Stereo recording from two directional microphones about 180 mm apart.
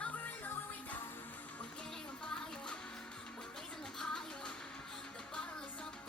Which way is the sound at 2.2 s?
5° left (ahead or behind).